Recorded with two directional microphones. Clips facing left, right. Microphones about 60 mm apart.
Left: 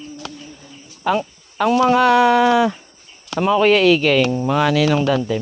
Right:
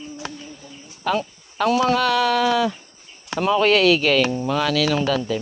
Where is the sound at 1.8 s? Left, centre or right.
Left.